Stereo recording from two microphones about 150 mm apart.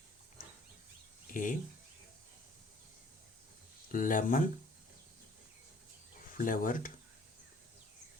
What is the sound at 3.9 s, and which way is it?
Speech, 60° left (ahead or behind).